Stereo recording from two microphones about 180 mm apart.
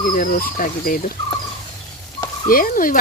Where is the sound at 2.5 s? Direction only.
50° left (ahead or behind).